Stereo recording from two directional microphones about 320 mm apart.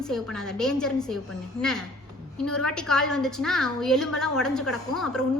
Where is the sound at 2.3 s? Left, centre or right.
Centre.